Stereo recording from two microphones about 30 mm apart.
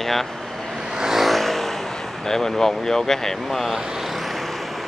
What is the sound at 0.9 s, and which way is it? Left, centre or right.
Vehicle, centre.